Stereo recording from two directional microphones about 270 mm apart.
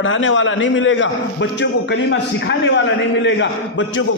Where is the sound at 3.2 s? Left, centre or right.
Left.